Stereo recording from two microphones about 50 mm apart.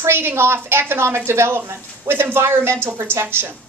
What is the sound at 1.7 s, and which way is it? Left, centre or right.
A woman's voice, right.